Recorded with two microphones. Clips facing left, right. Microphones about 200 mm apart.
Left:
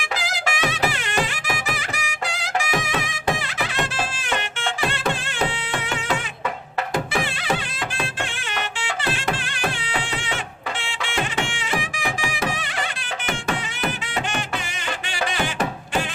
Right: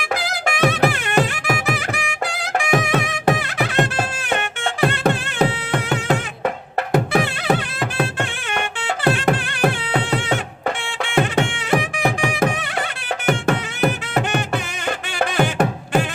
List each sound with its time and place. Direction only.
0.1 s music: 55° right (ahead or behind)